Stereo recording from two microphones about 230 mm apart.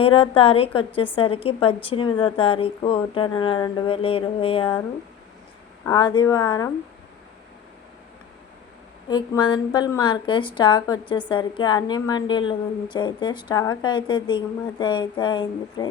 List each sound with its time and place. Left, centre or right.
0.0 s a woman's voice: left
5.8 s speech: centre
9.0 s a woman's voice: centre